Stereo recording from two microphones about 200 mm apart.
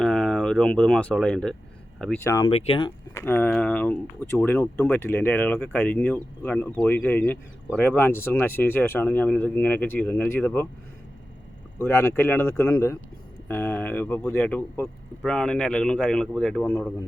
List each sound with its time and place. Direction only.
0.0 s speech: 5° left (ahead or behind)
2.2 s speech: 15° left (ahead or behind)
2.5 s speech: 30° left (ahead or behind)
3.2 s speech: 10° left (ahead or behind)
11.8 s speech: 10° left (ahead or behind)